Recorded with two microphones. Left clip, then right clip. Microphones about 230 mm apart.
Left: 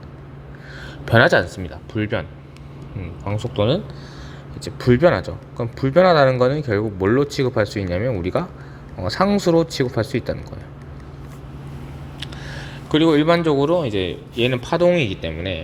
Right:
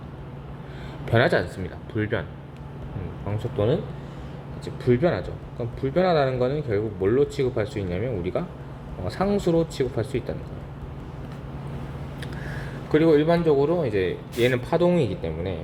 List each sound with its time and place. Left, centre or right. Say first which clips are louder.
1.0 s speech: left 7 dB; left
3.2 s speech: left 4 dB; left
4.8 s speech: left 7 dB; left
12.2 s a sound: left 4 dB; left
14.4 s speech: left 4 dB; left